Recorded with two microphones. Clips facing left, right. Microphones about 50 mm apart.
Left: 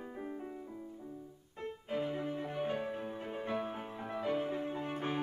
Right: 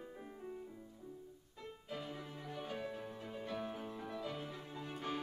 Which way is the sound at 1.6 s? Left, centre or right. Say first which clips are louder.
Left 9 dB; left.